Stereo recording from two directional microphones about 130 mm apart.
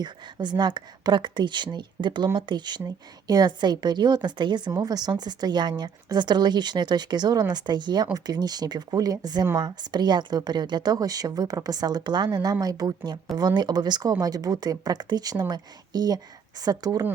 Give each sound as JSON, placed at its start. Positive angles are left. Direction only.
{"t": 0.0, "sound": "a woman's voice", "side_deg": -35}